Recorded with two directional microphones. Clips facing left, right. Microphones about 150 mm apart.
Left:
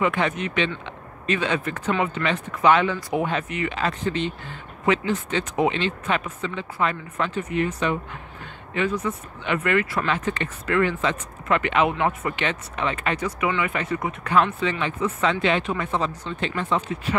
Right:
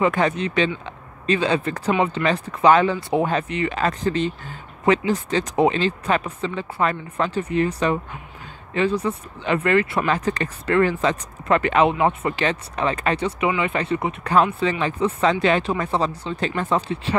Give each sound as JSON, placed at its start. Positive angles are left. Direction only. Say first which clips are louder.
{"t": 0.0, "sound": "speech", "louder": "right 3 dB", "side_deg": -35}